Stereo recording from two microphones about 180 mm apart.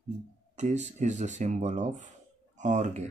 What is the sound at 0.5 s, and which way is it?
Speech, 40° right (ahead or behind).